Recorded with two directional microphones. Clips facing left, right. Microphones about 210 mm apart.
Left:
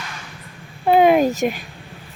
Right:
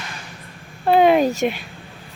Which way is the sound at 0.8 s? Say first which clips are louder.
Left 1 dB; 5° left (ahead or behind).